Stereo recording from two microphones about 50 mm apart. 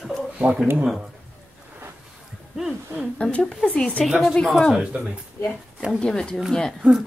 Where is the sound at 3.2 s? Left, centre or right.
Left.